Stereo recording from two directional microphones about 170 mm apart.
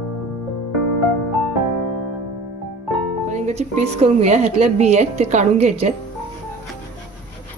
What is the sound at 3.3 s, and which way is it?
A woman's voice, 45° right (ahead or behind).